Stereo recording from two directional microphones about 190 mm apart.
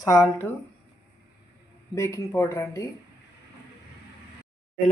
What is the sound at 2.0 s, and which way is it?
Speech, 15° left (ahead or behind).